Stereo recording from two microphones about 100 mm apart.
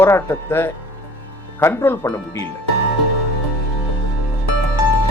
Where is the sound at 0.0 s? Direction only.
25° left (ahead or behind).